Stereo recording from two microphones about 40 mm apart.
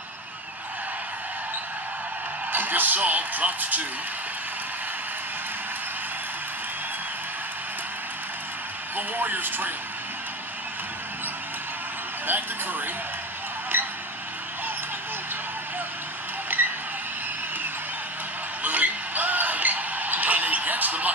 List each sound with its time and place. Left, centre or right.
2.5 s a sound: right
3.0 s speech: right
8.9 s a man's voice: right
12.3 s a man's voice: right
16.5 s a sound: right
18.6 s music: right